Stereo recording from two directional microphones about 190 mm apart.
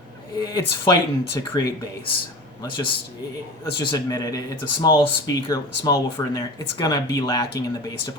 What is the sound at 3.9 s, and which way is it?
Speech, 20° left (ahead or behind).